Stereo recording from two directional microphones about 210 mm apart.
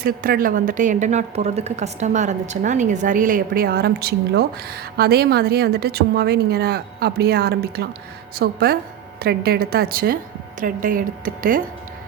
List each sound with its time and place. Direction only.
0.0 s a woman's voice: 45° right (ahead or behind)